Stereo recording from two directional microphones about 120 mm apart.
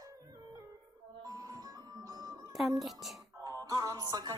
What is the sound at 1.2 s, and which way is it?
Music, 30° right (ahead or behind).